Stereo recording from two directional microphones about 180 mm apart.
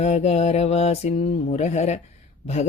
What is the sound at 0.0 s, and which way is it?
Speech, 40° left (ahead or behind).